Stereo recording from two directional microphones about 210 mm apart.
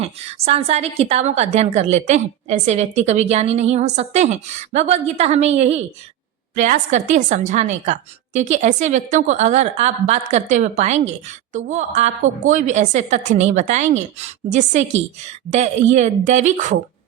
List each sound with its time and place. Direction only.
0.0 s a woman's voice: 30° right (ahead or behind)